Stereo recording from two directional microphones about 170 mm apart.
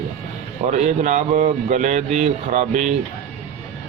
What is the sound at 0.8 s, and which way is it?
Speech, 45° right (ahead or behind).